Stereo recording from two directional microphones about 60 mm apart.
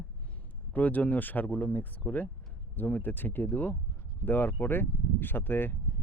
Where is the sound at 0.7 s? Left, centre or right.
Left.